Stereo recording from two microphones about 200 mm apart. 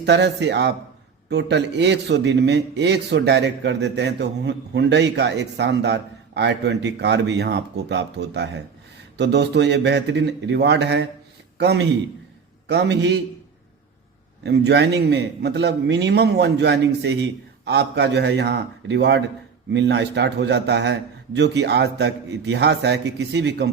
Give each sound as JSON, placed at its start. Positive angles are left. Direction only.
{"t": 0.0, "sound": "a man's voice", "side_deg": -60}
{"t": 14.4, "sound": "a man's voice", "side_deg": -60}